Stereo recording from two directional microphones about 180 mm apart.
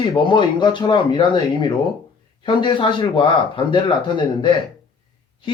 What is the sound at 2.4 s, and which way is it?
Speech, 25° left (ahead or behind).